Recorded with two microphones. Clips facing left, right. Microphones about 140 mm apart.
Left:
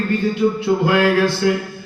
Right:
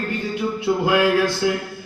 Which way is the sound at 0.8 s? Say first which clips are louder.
Left 1 dB; 15° right (ahead or behind).